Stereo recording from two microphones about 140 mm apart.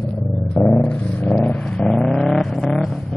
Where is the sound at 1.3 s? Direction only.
5° left (ahead or behind).